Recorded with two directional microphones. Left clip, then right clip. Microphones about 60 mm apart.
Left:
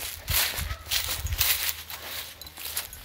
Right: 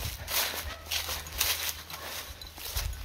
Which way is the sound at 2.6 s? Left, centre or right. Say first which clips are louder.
Left 2 dB; right.